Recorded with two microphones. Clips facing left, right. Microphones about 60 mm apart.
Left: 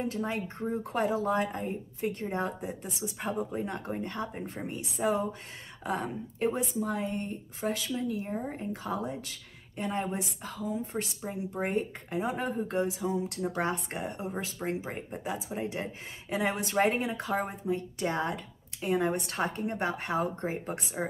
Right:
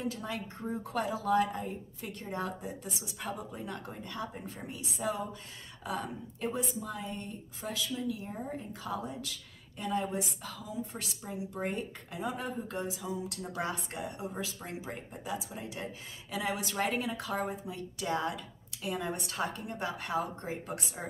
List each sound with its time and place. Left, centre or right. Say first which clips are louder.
0.0 s speech: left 4 dB; left